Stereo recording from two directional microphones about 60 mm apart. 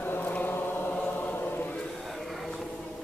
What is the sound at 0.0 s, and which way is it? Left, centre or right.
Chant, left.